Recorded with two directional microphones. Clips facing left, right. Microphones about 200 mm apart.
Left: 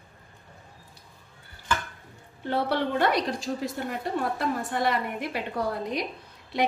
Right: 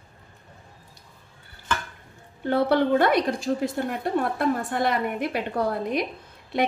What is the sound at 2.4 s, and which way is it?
A woman's voice, 50° right (ahead or behind).